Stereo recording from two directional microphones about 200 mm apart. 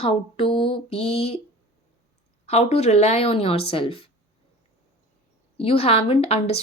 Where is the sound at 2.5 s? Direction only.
30° left (ahead or behind).